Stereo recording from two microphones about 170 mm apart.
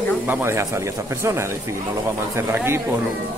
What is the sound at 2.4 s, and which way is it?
Speech, 15° right (ahead or behind).